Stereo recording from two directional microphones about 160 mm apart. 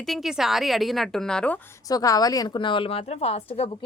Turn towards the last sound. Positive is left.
turn(degrees=40)  # may be behind; listen again after turning